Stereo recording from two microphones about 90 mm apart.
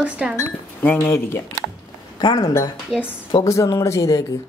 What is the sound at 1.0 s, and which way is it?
Speech, 30° left (ahead or behind).